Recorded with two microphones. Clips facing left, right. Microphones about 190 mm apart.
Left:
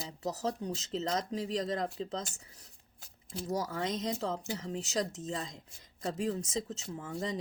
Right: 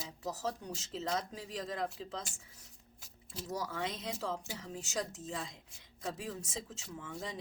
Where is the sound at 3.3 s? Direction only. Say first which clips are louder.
Left 5 dB; 40° left (ahead or behind).